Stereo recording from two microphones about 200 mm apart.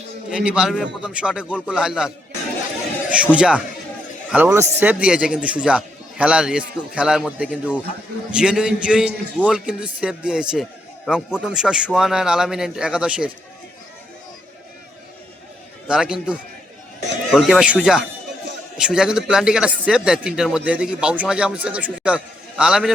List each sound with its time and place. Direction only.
0.3 s a man's voice: 5° right (ahead or behind)
15.9 s a man's voice: 5° right (ahead or behind)